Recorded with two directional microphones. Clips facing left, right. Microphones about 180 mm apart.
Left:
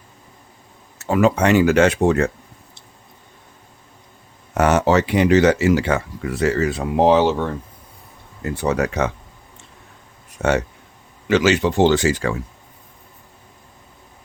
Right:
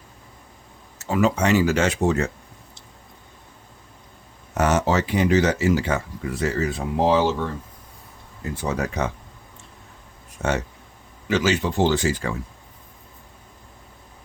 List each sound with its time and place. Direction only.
0.9 s speech: 60° left (ahead or behind)
4.5 s speech: 60° left (ahead or behind)
10.4 s speech: 75° left (ahead or behind)